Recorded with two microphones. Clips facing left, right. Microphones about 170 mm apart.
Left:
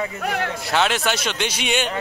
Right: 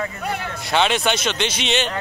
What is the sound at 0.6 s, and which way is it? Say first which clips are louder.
Speech: right 3 dB; 5° left (ahead or behind).